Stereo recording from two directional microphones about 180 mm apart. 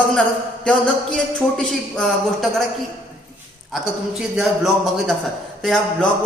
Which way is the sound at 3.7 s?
Centre (ahead or behind).